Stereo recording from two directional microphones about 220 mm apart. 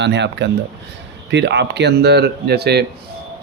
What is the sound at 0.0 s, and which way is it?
Speech, 50° right (ahead or behind).